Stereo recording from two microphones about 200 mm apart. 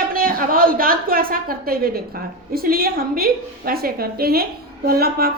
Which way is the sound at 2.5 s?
50° right (ahead or behind).